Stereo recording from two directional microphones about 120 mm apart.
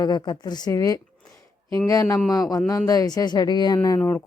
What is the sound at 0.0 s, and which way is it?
Speech, 35° left (ahead or behind).